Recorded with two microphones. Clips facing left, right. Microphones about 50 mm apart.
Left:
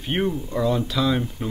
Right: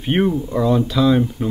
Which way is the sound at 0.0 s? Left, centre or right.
Centre.